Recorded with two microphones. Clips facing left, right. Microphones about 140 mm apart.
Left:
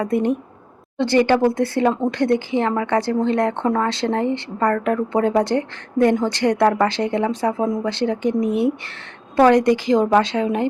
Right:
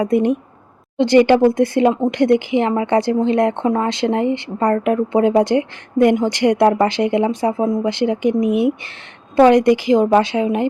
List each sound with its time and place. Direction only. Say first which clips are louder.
0.0 s speech: right 4 dB; 15° right (ahead or behind)